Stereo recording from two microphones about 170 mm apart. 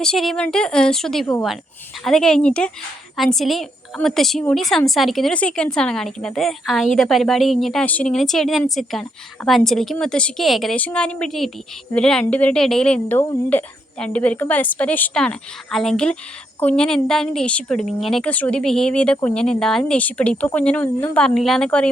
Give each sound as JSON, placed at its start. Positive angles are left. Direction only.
{"t": 0.0, "sound": "a woman's voice", "side_deg": 0}